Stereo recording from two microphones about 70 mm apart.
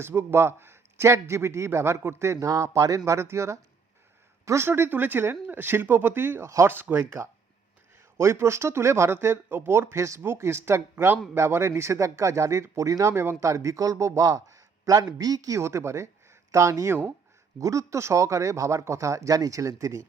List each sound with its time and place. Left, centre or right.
0.0 s a man's voice: right
3.1 s a man's voice: right
13.1 s speech: right
14.3 s a sound: right
15.2 s speech: right